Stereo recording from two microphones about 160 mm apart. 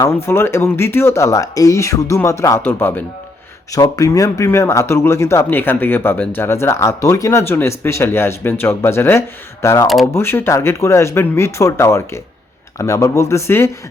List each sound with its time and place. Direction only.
0.0 s speech: 15° left (ahead or behind)
9.8 s speech: centre (ahead or behind)
10.2 s speech: 15° left (ahead or behind)